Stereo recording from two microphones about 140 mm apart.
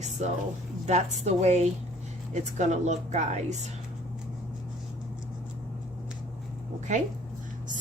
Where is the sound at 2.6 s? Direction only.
55° right (ahead or behind).